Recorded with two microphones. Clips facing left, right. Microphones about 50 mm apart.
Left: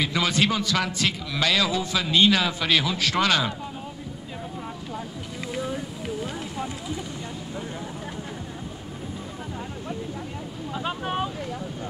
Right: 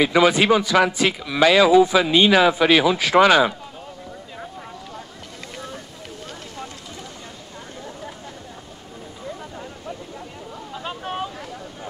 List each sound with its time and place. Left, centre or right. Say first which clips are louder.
0.0 s speech: right 7 dB; right
5.5 s a sound: left 7 dB; centre
10.7 s boat: left 2 dB; centre